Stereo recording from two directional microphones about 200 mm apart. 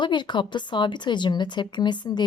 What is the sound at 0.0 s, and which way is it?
Speech, 20° left (ahead or behind).